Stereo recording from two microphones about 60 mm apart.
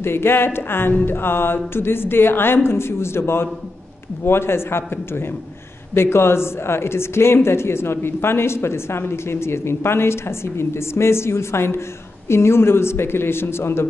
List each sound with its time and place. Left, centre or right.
0.0 s speech: left